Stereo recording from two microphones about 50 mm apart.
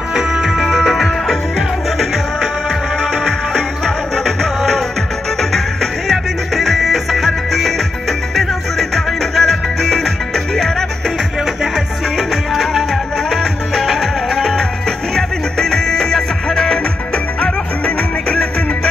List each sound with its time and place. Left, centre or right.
0.1 s music: centre
3.5 s music: centre